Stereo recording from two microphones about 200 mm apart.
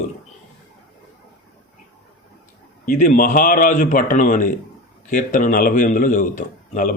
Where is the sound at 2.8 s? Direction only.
40° left (ahead or behind).